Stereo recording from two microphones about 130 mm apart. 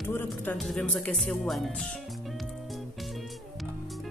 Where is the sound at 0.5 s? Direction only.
5° left (ahead or behind).